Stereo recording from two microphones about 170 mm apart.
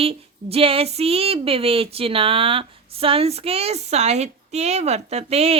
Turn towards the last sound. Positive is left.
turn(degrees=-35)  # may be behind; listen again after turning